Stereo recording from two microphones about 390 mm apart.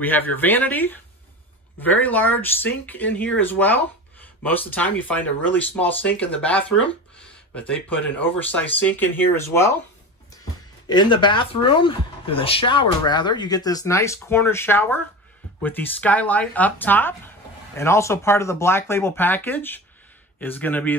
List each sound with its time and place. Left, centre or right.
0.0 s speech: centre